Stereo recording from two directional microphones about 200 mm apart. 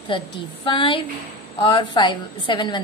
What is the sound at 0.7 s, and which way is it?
A woman's voice, 25° left (ahead or behind).